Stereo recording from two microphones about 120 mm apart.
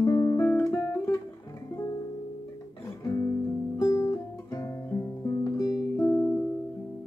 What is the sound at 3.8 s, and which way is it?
Guitar, 25° left (ahead or behind).